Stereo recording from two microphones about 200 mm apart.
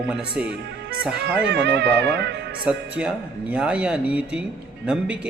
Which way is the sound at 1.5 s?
60° right (ahead or behind).